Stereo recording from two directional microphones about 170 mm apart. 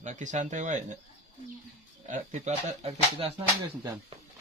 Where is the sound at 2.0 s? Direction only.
45° right (ahead or behind).